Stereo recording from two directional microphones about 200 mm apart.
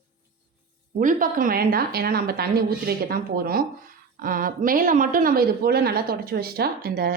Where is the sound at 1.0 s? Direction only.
40° right (ahead or behind).